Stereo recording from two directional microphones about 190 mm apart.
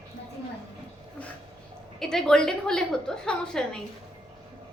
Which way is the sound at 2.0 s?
5° left (ahead or behind).